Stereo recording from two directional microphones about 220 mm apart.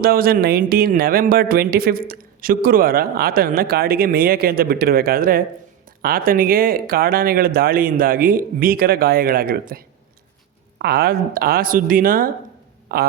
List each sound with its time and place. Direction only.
0.0 s speech: 40° right (ahead or behind)